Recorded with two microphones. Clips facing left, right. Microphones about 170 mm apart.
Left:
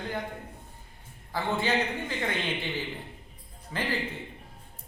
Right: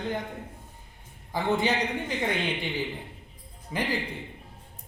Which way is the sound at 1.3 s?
15° right (ahead or behind).